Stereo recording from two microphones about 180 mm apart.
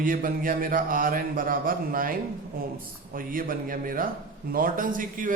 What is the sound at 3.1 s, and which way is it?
A man's voice, 50° right (ahead or behind).